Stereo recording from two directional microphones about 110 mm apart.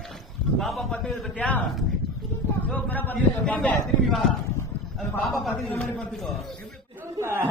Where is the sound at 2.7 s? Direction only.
15° left (ahead or behind).